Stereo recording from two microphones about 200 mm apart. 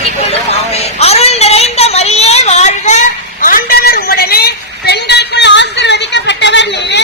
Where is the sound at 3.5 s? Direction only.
45° left (ahead or behind).